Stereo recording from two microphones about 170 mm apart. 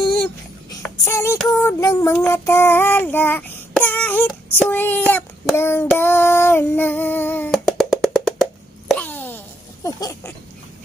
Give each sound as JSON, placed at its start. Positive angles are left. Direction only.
{"t": 1.0, "sound": "music", "side_deg": 15}
{"t": 1.5, "sound": "child singing", "side_deg": 15}
{"t": 3.7, "sound": "a sound", "side_deg": 10}
{"t": 4.6, "sound": "child singing", "side_deg": 10}
{"t": 7.5, "sound": "music", "side_deg": 0}
{"t": 9.8, "sound": "a sound", "side_deg": 20}